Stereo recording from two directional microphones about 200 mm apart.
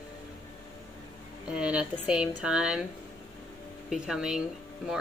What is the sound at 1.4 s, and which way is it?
Speech, 5° right (ahead or behind).